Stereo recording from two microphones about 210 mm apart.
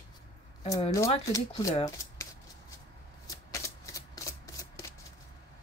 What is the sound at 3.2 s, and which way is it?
Shuffling cards, 15° left (ahead or behind).